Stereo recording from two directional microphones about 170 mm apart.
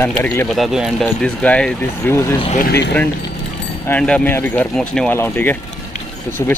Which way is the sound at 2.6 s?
75° left (ahead or behind).